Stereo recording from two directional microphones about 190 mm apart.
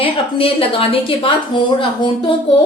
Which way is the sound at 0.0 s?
30° left (ahead or behind).